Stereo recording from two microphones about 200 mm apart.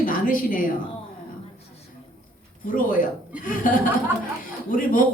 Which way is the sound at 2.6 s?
45° left (ahead or behind).